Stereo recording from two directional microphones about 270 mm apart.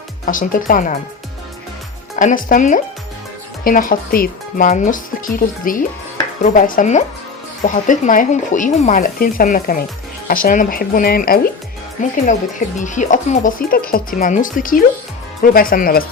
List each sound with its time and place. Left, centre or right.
0.3 s speech: left
2.1 s speech: left